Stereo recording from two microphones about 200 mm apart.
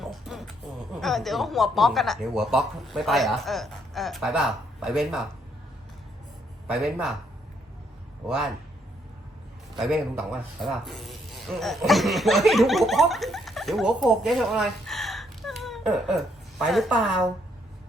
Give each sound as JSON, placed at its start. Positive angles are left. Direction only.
{"t": 0.0, "sound": "music", "side_deg": 0}
{"t": 0.9, "sound": "speech", "side_deg": 0}
{"t": 6.7, "sound": "speech", "side_deg": 0}
{"t": 8.3, "sound": "speech", "side_deg": 0}
{"t": 9.7, "sound": "speech", "side_deg": 0}